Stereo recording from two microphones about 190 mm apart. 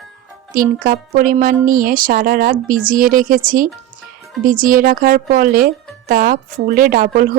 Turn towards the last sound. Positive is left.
turn(degrees=-45)  # may be behind; listen again after turning